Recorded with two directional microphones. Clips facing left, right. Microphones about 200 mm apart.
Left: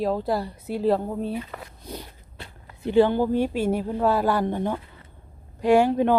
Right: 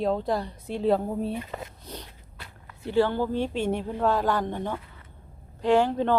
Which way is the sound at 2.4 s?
20° left (ahead or behind).